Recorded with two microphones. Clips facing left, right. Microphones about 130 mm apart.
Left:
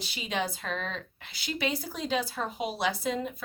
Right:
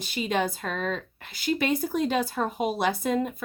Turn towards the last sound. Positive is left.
turn(degrees=-50)  # may be behind; listen again after turning